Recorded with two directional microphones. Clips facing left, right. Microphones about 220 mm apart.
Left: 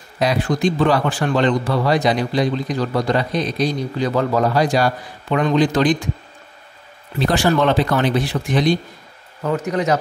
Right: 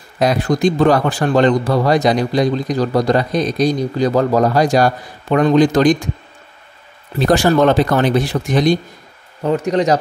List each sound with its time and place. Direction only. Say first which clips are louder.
0.2 s a man's voice: right 3 dB; 45° right (ahead or behind)
7.2 s a man's voice: right 4 dB; 45° right (ahead or behind)